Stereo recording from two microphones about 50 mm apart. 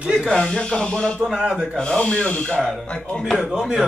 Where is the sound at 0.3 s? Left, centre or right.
Centre.